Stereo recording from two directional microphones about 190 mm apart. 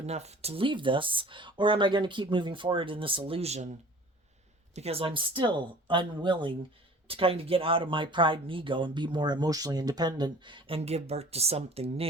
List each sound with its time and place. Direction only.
0.0 s speech: 35° right (ahead or behind)
4.7 s speech: 35° right (ahead or behind)